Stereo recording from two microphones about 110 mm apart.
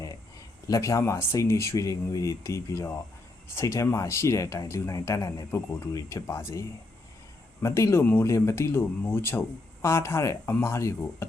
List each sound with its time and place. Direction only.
0.7 s speech: 30° left (ahead or behind)